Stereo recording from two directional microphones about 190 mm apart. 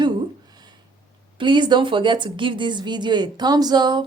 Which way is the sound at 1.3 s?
25° right (ahead or behind).